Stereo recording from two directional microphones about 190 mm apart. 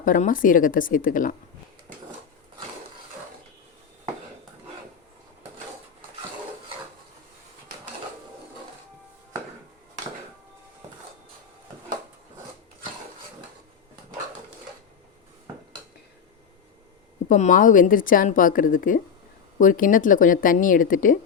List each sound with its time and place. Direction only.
0.0 s a woman's voice: 45° left (ahead or behind)
17.2 s a woman's voice: 40° left (ahead or behind)